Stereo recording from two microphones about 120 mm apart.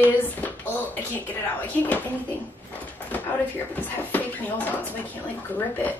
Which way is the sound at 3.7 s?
15° left (ahead or behind).